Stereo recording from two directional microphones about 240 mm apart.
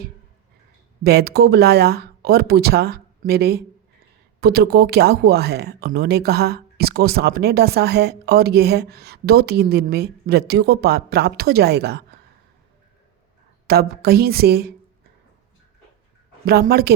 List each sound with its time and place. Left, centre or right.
1.0 s speech: right
13.7 s speech: right
16.5 s speech: right